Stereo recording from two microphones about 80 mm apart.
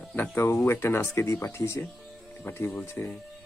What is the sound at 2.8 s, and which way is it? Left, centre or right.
Speech, left.